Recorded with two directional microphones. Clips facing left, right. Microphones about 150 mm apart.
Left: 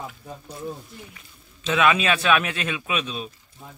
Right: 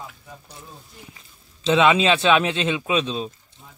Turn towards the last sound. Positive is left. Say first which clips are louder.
# right 5 dB
turn(degrees=-30)  # may be behind; listen again after turning